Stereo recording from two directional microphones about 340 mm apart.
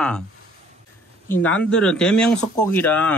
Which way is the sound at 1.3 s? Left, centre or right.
Centre.